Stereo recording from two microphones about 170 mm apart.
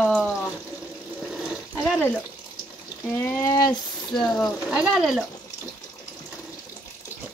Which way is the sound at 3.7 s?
5° left (ahead or behind).